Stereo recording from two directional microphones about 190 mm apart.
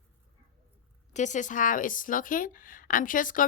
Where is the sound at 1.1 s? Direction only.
40° left (ahead or behind).